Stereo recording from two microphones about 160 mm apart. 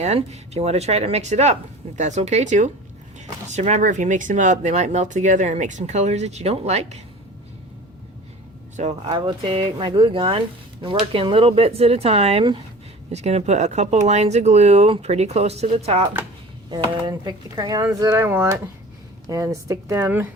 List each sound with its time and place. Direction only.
0.0 s speech: 45° right (ahead or behind)
8.7 s speech: 40° right (ahead or behind)
16.6 s speech: 30° right (ahead or behind)